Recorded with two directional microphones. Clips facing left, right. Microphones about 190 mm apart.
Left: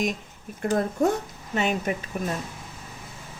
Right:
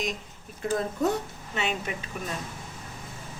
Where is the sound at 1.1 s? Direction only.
40° left (ahead or behind).